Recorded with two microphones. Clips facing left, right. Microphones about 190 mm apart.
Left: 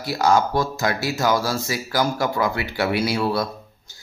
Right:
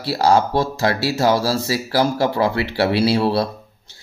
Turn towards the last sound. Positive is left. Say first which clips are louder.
# right 5 dB
turn(degrees=-30)  # may be behind; listen again after turning